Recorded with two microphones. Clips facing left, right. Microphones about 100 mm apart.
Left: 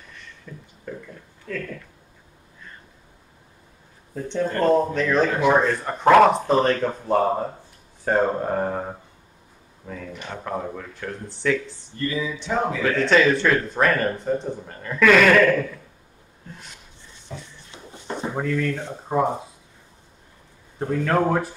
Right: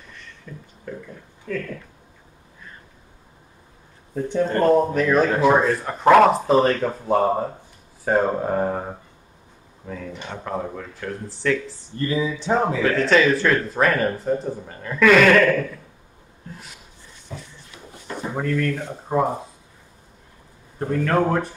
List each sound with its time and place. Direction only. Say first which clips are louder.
0.5 s speech: right 1 dB; centre (ahead or behind)
4.1 s speech: right 3 dB; 5° right (ahead or behind)
11.7 s speech: right 3 dB; 30° right (ahead or behind)
12.8 s speech: left 1 dB; centre (ahead or behind)
16.4 s a sound: right 2 dB; 5° right (ahead or behind)
17.6 s a sound: left 3 dB; 25° left (ahead or behind)
18.3 s speech: right 2 dB; centre (ahead or behind)
20.8 s speech: right 1 dB; centre (ahead or behind)